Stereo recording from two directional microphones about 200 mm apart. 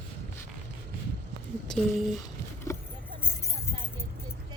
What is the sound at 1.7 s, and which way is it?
Speech, centre (ahead or behind).